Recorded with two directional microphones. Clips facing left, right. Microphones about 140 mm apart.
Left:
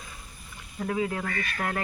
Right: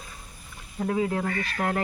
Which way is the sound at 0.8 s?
30° right (ahead or behind).